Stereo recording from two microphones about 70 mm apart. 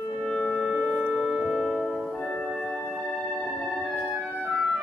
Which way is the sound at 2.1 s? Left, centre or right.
Centre.